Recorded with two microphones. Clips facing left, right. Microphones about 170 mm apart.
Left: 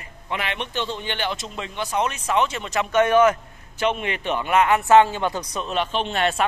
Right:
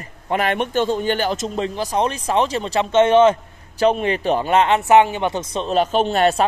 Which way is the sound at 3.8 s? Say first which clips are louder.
Right 7 dB; 35° right (ahead or behind).